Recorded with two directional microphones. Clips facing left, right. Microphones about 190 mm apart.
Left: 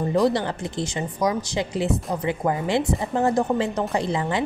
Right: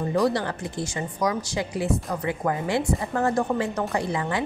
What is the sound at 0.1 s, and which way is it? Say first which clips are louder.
Speech: left 2 dB; 20° left (ahead or behind).